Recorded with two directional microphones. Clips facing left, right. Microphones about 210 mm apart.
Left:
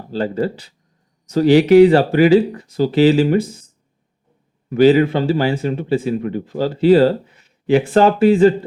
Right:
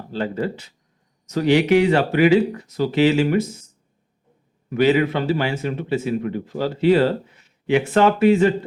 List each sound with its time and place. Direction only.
0.1 s speech: 35° left (ahead or behind)
4.7 s speech: 35° left (ahead or behind)